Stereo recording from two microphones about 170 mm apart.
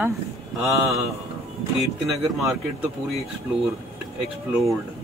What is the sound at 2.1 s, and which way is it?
Speech, centre (ahead or behind).